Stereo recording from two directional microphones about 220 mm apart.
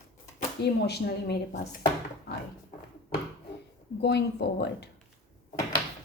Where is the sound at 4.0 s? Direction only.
50° left (ahead or behind).